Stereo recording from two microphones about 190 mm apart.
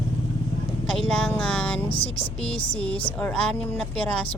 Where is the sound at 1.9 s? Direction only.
30° left (ahead or behind).